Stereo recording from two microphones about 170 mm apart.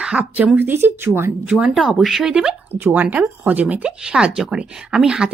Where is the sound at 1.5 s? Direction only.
5° right (ahead or behind).